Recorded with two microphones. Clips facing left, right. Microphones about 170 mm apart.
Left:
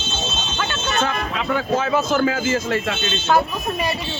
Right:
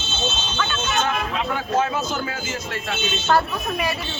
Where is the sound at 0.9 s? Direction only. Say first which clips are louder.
Left 3 dB; centre (ahead or behind).